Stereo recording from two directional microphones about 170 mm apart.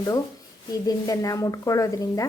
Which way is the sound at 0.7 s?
20° left (ahead or behind).